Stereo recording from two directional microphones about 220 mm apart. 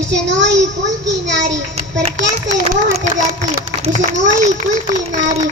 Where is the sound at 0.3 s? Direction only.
55° right (ahead or behind).